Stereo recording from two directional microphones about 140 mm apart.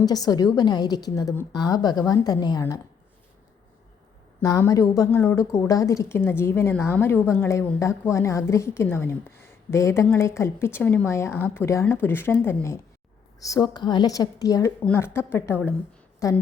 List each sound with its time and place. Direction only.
0.0 s a woman's voice: 25° left (ahead or behind)
4.4 s a woman's voice: 25° left (ahead or behind)